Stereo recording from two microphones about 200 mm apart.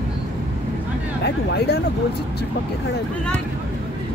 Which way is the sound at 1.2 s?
55° left (ahead or behind).